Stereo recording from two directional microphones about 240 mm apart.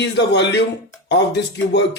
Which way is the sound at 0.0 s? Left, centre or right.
Left.